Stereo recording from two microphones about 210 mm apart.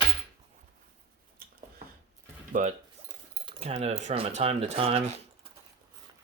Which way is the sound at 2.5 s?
40° right (ahead or behind).